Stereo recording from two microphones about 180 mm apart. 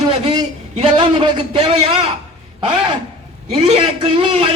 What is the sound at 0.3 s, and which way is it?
A man's voice, 25° right (ahead or behind).